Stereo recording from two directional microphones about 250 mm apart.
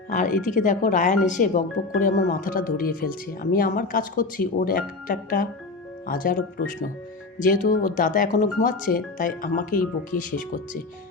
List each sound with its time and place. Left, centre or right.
0.1 s speech: left